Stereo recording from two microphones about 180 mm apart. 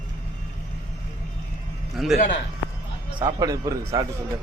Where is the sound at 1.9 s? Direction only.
Centre (ahead or behind).